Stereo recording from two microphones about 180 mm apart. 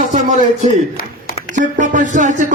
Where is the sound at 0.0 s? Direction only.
45° right (ahead or behind).